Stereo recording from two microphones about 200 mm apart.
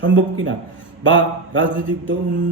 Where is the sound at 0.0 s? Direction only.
70° right (ahead or behind).